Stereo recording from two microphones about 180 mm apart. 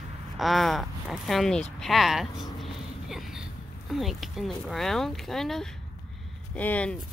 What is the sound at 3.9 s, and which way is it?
Speech, centre (ahead or behind).